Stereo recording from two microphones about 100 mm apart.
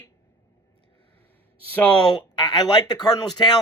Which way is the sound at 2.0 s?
45° left (ahead or behind).